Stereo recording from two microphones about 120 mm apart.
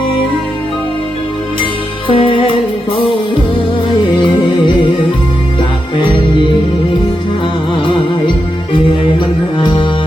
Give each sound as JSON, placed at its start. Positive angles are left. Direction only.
{"t": 2.0, "sound": "music", "side_deg": 50}
{"t": 4.3, "sound": "music", "side_deg": 40}
{"t": 9.6, "sound": "music", "side_deg": 40}